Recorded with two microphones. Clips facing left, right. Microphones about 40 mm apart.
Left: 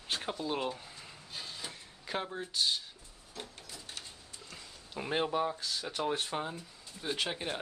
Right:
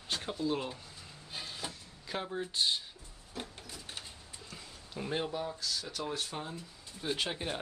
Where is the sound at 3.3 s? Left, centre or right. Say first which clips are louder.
Right 3 dB; centre.